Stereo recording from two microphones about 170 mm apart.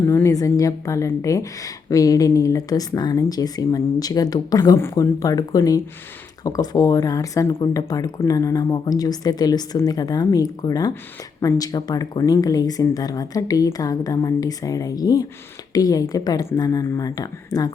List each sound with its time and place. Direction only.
0.0 s a woman's voice: 15° left (ahead or behind)